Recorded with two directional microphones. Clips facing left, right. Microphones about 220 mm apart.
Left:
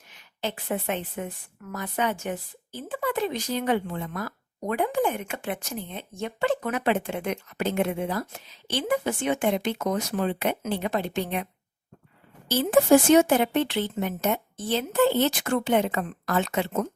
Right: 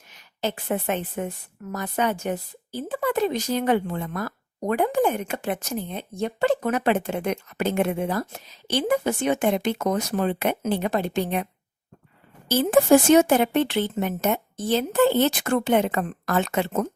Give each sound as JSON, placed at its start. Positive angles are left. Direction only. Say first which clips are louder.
{"t": 0.1, "sound": "a woman's voice", "louder": "right 4 dB", "side_deg": -45}
{"t": 12.5, "sound": "speech", "louder": "right 2 dB", "side_deg": -50}